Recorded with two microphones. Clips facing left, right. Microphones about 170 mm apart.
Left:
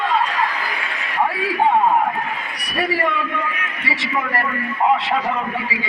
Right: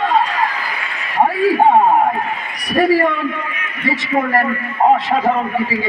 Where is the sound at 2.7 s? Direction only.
50° right (ahead or behind).